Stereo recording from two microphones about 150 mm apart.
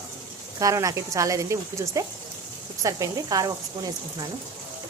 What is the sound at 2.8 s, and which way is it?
A woman's voice, 25° right (ahead or behind).